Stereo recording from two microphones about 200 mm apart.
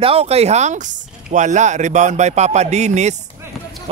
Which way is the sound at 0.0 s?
30° right (ahead or behind).